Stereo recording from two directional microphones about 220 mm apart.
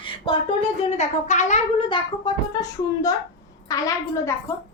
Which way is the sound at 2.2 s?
15° left (ahead or behind).